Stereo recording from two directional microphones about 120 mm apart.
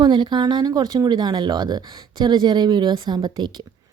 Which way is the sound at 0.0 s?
40° right (ahead or behind).